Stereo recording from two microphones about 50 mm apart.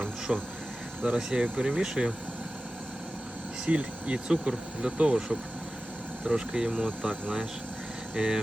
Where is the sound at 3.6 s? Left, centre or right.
Right.